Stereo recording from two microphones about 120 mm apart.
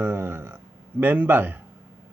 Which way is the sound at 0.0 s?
20° right (ahead or behind).